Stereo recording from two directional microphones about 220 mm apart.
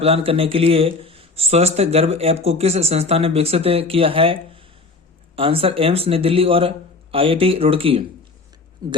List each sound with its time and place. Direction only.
0.0 s speech: 25° right (ahead or behind)